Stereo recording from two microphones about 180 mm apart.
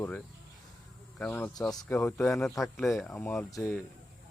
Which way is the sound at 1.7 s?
20° left (ahead or behind).